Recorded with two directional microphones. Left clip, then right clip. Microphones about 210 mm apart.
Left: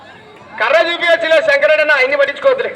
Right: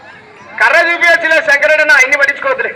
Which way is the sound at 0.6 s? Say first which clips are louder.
Right 4 dB; 45° left (ahead or behind).